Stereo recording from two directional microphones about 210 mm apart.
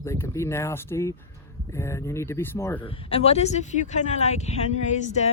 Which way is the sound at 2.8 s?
25° left (ahead or behind).